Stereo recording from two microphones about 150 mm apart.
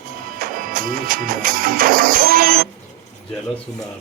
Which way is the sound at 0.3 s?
70° right (ahead or behind).